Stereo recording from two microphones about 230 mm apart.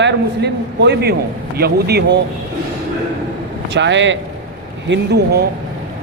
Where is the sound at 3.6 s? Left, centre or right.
Right.